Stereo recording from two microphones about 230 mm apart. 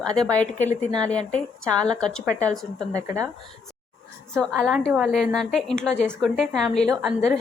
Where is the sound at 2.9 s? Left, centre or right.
Centre.